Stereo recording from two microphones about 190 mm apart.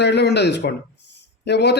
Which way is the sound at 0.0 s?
65° left (ahead or behind).